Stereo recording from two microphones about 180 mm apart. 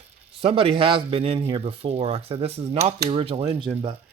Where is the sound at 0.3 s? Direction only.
30° right (ahead or behind).